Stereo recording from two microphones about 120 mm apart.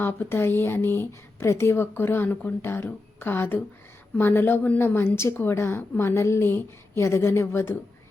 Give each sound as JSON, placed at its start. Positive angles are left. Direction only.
{"t": 0.0, "sound": "a woman's voice", "side_deg": 20}